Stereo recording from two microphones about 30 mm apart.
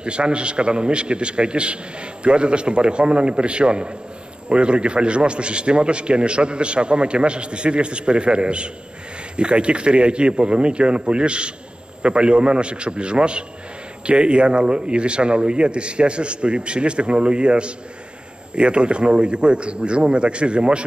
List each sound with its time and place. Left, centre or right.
0.0 s a man's voice: right